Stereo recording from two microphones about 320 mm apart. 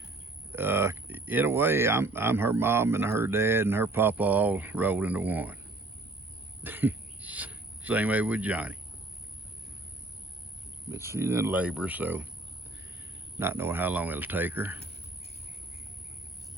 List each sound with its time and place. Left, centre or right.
0.5 s speech: centre
6.6 s speech: centre
10.9 s speech: centre
13.4 s speech: centre